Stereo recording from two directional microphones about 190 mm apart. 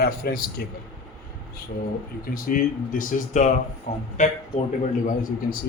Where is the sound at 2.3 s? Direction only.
45° left (ahead or behind).